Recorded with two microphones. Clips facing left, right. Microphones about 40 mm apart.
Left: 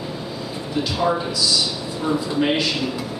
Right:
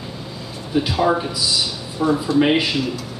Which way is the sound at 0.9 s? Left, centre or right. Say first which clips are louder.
Right 1 dB; centre.